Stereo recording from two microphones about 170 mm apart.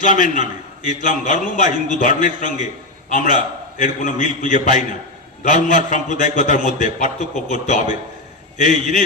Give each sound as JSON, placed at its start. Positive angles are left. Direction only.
{"t": 0.0, "sound": "a man's voice", "side_deg": 50}